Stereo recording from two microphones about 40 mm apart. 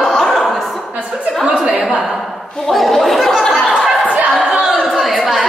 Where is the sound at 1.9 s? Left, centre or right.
Centre.